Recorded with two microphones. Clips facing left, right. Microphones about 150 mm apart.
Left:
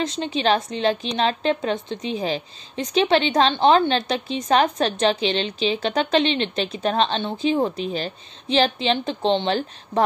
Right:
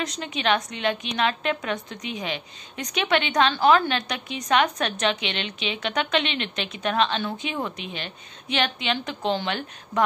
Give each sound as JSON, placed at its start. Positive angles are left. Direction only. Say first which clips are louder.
{"t": 0.0, "sound": "a woman's voice", "louder": "left 5 dB", "side_deg": 30}